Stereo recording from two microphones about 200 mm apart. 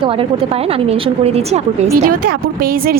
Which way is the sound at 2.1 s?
45° right (ahead or behind).